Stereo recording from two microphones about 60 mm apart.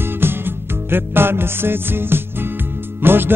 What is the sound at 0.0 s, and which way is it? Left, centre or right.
Music, right.